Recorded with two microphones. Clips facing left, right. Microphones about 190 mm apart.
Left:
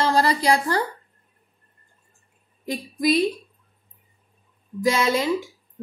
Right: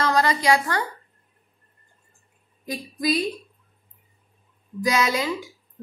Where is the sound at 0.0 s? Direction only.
30° left (ahead or behind).